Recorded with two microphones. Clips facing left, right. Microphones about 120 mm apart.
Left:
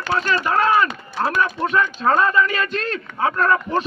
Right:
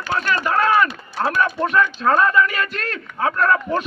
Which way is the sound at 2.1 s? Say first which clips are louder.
Right 1 dB; 25° left (ahead or behind).